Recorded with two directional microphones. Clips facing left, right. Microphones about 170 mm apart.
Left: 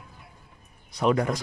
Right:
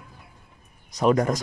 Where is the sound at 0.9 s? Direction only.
45° right (ahead or behind).